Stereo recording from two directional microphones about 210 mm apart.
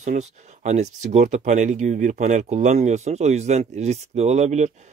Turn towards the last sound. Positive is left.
turn(degrees=-30)  # may be behind; listen again after turning